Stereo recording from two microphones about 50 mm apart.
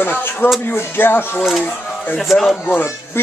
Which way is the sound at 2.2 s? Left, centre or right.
Centre.